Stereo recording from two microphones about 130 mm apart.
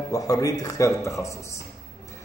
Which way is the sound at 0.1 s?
25° left (ahead or behind).